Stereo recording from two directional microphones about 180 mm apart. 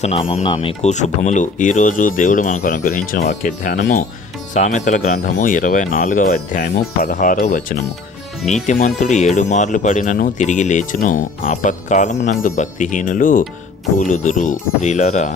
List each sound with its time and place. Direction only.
0.0 s speech: 35° left (ahead or behind)